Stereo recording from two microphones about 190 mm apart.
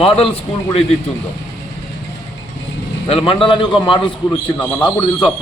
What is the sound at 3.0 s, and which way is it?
A man's voice, 25° left (ahead or behind).